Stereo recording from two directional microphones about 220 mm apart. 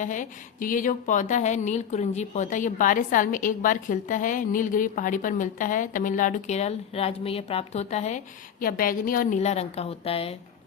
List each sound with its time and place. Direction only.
0.0 s a woman's voice: 35° left (ahead or behind)